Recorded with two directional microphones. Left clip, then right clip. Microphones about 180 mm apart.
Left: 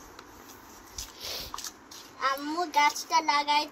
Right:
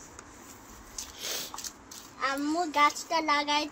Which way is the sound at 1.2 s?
60° right (ahead or behind).